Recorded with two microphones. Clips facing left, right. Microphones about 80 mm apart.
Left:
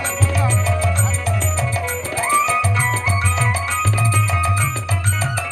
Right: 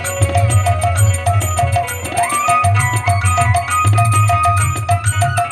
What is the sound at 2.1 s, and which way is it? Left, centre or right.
Music, right.